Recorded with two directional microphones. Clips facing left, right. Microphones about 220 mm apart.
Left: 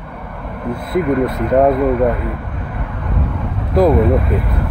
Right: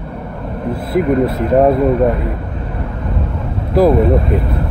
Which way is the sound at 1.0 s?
25° right (ahead or behind).